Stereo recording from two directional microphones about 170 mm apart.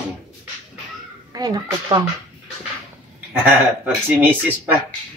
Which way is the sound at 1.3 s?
20° right (ahead or behind).